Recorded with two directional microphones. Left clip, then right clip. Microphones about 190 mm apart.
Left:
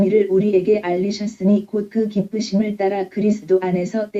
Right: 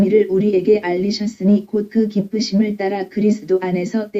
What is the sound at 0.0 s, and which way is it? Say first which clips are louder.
Speech: right 1 dB; 40° right (ahead or behind).